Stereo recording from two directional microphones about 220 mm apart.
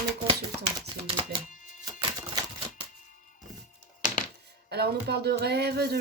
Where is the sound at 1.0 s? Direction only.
25° right (ahead or behind).